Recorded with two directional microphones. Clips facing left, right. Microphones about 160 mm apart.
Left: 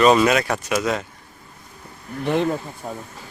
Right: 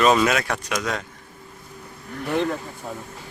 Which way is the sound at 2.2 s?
20° left (ahead or behind).